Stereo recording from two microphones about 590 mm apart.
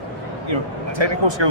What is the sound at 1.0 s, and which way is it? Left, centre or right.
Speech, right.